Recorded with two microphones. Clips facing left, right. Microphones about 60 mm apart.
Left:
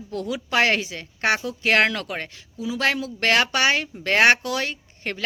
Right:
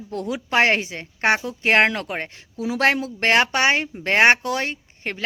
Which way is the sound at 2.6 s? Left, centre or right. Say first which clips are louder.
Right 3 dB; right.